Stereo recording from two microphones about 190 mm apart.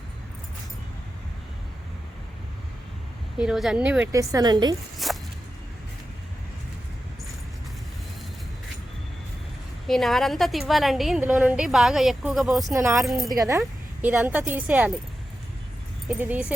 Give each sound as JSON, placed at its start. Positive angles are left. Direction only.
{"t": 3.3, "sound": "a woman's voice", "side_deg": -5}
{"t": 4.1, "sound": "a woman's voice", "side_deg": -15}
{"t": 5.0, "sound": "music", "side_deg": 0}
{"t": 9.8, "sound": "a woman's voice", "side_deg": 0}
{"t": 12.7, "sound": "a woman's voice", "side_deg": -15}
{"t": 13.6, "sound": "speech", "side_deg": -5}
{"t": 16.0, "sound": "speech", "side_deg": -10}